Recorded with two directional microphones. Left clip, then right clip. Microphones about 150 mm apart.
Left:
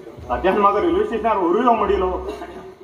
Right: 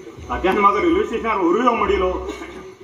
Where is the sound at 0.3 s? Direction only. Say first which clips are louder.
Even; 15° right (ahead or behind).